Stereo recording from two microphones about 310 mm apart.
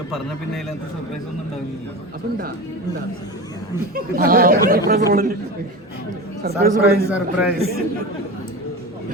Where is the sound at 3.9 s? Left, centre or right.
Right.